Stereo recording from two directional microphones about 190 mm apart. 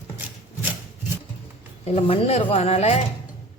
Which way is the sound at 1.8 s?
35° left (ahead or behind).